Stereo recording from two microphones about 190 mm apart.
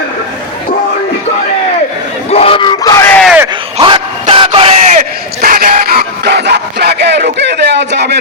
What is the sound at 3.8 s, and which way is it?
Yell, 25° right (ahead or behind).